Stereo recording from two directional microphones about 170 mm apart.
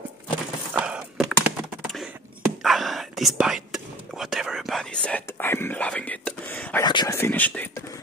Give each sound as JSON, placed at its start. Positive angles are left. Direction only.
{"t": 0.7, "sound": "typing", "side_deg": -5}
{"t": 2.6, "sound": "whispering", "side_deg": 0}
{"t": 6.8, "sound": "a sound", "side_deg": 25}
{"t": 7.2, "sound": "whispering", "side_deg": 10}